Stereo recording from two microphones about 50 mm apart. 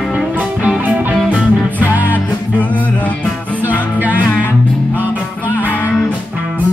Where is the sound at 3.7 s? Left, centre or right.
Right.